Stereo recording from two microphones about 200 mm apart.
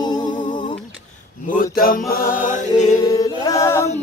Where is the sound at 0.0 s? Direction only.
20° left (ahead or behind).